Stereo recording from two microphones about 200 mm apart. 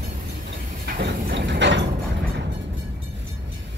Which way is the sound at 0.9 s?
60° right (ahead or behind).